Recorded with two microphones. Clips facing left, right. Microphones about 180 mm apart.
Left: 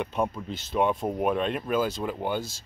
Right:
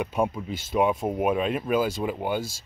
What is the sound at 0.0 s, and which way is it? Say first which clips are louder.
Speech: right 2 dB; 10° right (ahead or behind).